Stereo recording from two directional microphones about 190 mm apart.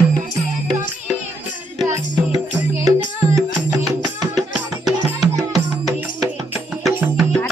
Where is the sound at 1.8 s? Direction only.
20° right (ahead or behind).